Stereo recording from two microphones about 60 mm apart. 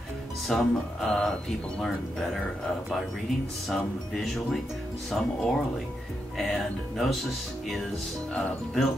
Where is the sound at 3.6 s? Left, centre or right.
Centre.